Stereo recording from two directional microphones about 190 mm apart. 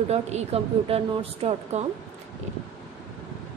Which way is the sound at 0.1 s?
35° right (ahead or behind).